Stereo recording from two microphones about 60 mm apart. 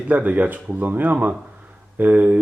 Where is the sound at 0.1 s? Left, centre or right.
Right.